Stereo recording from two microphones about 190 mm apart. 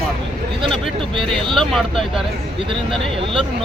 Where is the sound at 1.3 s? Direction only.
Centre (ahead or behind).